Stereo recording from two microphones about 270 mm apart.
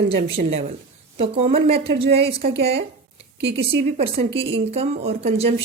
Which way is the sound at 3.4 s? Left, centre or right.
Right.